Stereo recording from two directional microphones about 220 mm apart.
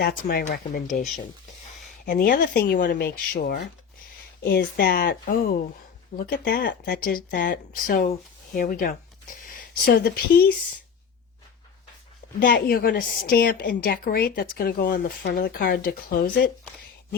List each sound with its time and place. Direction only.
0.0 s a woman's voice: 40° left (ahead or behind)
12.4 s a woman's voice: 40° left (ahead or behind)